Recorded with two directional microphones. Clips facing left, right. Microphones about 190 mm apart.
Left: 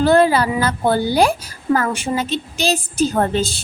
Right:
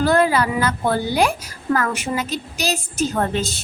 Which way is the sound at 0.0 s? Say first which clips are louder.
Left 3 dB; 30° left (ahead or behind).